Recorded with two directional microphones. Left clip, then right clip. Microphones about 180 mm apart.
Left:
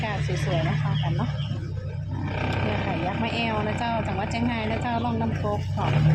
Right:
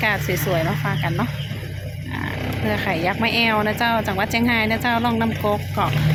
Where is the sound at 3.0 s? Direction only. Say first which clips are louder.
Right 11 dB; 15° right (ahead or behind).